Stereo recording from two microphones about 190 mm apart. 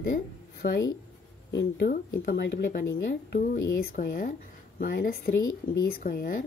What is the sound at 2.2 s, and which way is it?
Speech, 60° left (ahead or behind).